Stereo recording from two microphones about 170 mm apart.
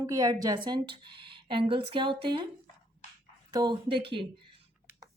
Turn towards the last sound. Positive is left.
turn(degrees=-30)  # may be behind; listen again after turning